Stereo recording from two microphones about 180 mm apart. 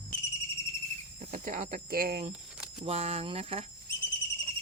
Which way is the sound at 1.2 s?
50° right (ahead or behind).